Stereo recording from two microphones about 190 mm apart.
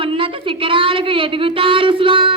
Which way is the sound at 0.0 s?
30° right (ahead or behind).